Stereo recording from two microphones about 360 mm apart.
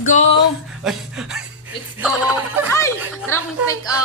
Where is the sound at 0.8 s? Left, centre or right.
Centre.